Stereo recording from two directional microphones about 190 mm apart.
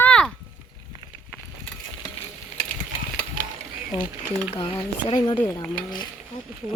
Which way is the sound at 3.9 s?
25° left (ahead or behind).